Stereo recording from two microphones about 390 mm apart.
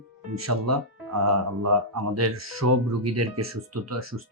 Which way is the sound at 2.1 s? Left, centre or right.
Right.